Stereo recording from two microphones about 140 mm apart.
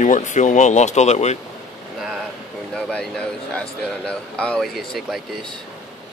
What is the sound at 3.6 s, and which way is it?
A man's voice, 10° left (ahead or behind).